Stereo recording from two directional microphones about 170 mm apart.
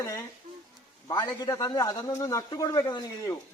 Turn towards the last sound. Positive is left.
turn(degrees=20)  # may be behind; listen again after turning